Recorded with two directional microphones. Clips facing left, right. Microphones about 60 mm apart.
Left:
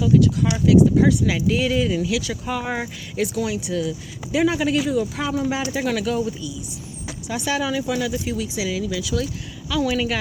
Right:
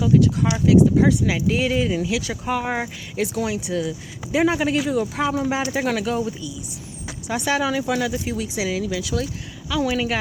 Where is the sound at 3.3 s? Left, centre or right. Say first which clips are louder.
Even; right.